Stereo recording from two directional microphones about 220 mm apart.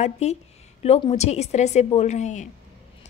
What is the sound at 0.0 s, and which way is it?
A woman's voice, 30° left (ahead or behind).